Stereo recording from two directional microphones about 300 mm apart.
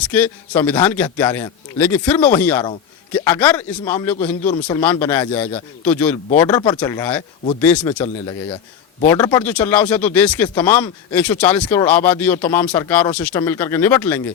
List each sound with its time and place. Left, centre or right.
0.1 s a man's voice: centre
4.4 s speech: centre
4.8 s a man's voice: centre
7.9 s speech: centre